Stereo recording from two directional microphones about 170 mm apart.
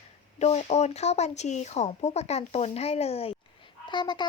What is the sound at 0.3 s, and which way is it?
Speech, 40° left (ahead or behind).